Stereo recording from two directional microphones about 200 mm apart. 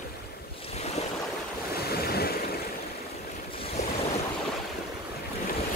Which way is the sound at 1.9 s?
50° left (ahead or behind).